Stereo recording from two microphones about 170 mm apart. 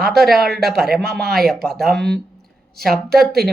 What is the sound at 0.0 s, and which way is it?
Speech, centre (ahead or behind).